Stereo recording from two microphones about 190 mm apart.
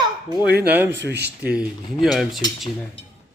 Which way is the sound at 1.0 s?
60° right (ahead or behind).